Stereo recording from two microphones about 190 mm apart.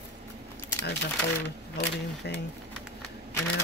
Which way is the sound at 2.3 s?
60° left (ahead or behind).